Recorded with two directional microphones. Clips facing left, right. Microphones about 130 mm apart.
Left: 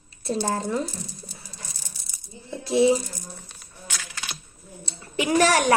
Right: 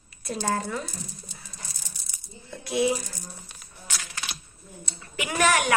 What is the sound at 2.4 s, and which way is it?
Speech, 25° left (ahead or behind).